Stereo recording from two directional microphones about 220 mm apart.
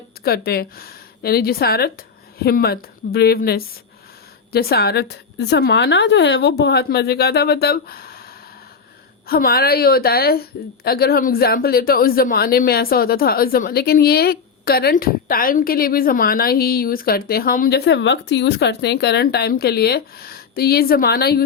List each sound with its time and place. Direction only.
0.3 s speech: 45° left (ahead or behind)
9.2 s speech: 45° left (ahead or behind)